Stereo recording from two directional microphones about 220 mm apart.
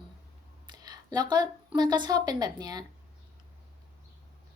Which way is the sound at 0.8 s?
20° right (ahead or behind).